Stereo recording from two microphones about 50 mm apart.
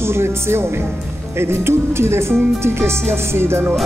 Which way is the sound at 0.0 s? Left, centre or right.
Right.